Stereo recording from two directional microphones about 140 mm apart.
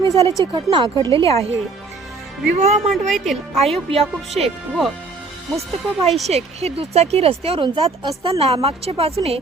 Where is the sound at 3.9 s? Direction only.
50° right (ahead or behind).